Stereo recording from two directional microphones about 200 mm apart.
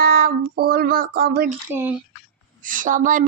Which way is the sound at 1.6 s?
10° right (ahead or behind).